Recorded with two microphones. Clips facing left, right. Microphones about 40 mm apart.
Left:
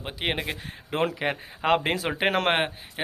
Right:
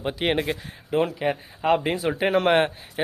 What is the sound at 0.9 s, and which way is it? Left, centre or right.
Speech, left.